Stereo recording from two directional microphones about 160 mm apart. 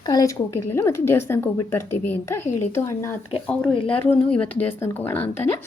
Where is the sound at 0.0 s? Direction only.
25° left (ahead or behind).